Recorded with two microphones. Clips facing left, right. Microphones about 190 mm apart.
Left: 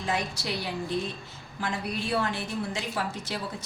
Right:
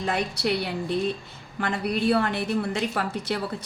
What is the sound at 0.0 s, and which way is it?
A woman's voice, 60° right (ahead or behind).